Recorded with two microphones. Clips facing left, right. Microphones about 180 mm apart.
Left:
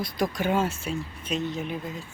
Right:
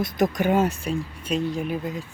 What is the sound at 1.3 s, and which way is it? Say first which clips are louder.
Speech: right 4 dB; 35° right (ahead or behind).